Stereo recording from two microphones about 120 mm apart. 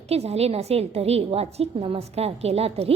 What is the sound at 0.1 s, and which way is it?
A woman's voice, 60° right (ahead or behind).